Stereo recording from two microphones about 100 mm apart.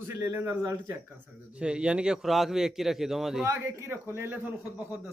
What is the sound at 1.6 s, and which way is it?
A man's voice, 10° right (ahead or behind).